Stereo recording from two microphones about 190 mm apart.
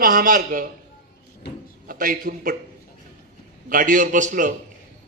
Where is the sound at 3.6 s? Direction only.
45° right (ahead or behind).